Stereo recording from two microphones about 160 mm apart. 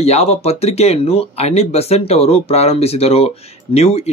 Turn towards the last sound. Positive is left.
turn(degrees=40)  # may be behind; listen again after turning